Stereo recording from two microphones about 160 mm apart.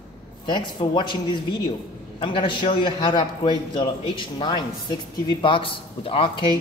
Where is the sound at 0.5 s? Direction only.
30° left (ahead or behind).